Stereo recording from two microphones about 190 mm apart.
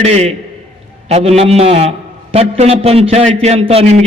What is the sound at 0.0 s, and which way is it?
A man's voice, 35° right (ahead or behind).